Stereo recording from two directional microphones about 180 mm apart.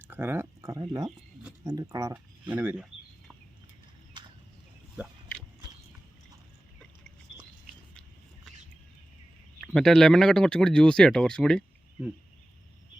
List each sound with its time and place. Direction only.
0.1 s speech: 10° right (ahead or behind)
2.5 s speech: 10° right (ahead or behind)
9.6 s speech: centre (ahead or behind)